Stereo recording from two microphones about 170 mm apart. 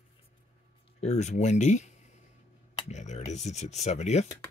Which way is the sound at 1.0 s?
45° left (ahead or behind).